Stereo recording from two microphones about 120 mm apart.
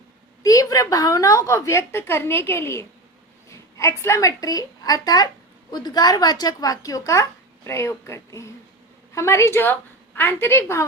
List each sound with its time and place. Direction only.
0.4 s a woman's voice: 30° left (ahead or behind)